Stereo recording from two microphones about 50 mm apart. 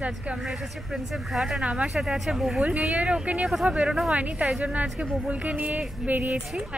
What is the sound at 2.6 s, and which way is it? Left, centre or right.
Speech, right.